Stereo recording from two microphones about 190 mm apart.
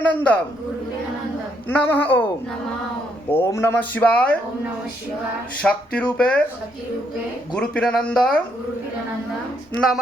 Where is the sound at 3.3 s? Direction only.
15° left (ahead or behind).